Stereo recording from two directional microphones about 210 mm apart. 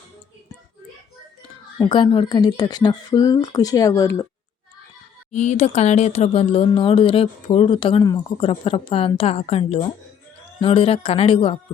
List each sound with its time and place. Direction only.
1.8 s speech: 20° left (ahead or behind)
5.3 s speech: 35° left (ahead or behind)